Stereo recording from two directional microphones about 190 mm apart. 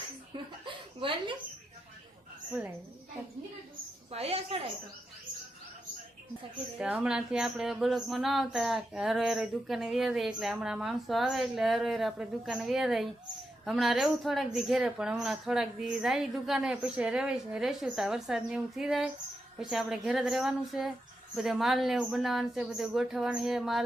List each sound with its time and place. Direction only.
0.6 s chuckle: 25° right (ahead or behind)
4.1 s a woman's voice: 30° right (ahead or behind)
6.7 s speech: 5° right (ahead or behind)